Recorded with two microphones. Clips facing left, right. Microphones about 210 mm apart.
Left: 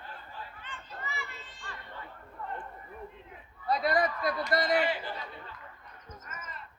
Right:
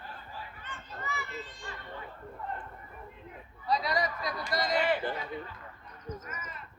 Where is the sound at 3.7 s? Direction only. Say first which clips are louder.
Left 3 dB; 55° left (ahead or behind).